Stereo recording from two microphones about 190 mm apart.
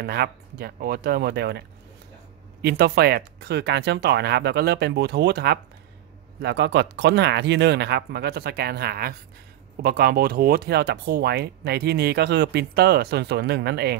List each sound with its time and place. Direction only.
0.0 s speech: 55° right (ahead or behind)
2.6 s speech: 60° right (ahead or behind)